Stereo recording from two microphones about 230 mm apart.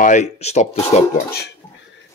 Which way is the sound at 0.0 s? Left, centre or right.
Left.